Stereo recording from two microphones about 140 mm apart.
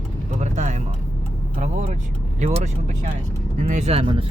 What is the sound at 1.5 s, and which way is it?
Speech, 55° right (ahead or behind).